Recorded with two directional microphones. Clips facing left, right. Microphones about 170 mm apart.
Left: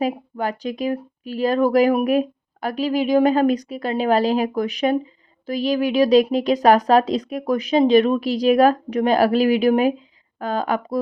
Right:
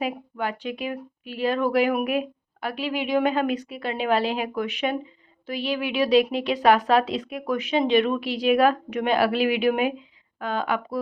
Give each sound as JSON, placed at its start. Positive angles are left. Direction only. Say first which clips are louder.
{"t": 0.0, "sound": "speech", "louder": "left 5 dB", "side_deg": 40}